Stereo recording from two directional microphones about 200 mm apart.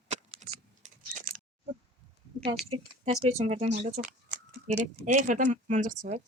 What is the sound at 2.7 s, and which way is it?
Speech, 35° right (ahead or behind).